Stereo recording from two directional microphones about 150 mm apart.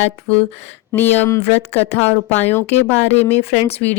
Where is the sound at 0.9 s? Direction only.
15° left (ahead or behind).